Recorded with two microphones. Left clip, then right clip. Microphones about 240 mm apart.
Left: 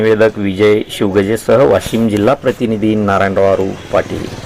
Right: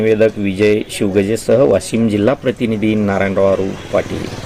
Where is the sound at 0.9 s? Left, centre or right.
Centre.